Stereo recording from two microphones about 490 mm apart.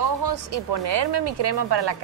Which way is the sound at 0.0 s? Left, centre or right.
Right.